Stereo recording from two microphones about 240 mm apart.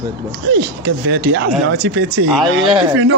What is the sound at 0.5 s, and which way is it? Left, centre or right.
Speech, right.